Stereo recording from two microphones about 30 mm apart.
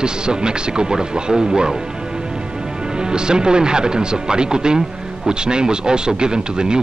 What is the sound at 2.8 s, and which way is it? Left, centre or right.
Speech, right.